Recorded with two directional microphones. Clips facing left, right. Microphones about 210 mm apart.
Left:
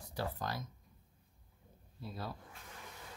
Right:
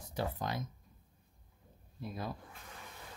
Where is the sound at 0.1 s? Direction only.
20° right (ahead or behind).